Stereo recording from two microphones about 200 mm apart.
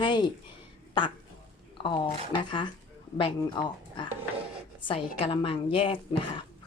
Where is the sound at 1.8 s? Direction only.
25° left (ahead or behind).